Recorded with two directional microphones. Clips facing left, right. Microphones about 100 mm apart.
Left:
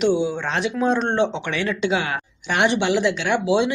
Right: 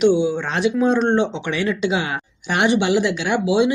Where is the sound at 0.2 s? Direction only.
10° right (ahead or behind).